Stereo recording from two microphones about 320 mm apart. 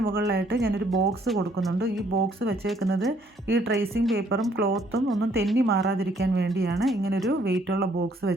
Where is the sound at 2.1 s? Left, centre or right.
Right.